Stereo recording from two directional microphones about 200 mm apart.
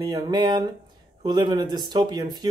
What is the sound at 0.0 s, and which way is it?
Speech, 20° right (ahead or behind).